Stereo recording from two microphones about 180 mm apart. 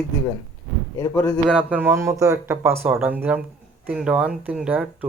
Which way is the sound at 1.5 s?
5° right (ahead or behind).